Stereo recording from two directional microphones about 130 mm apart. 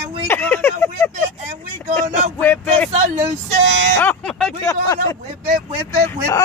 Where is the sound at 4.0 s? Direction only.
10° left (ahead or behind).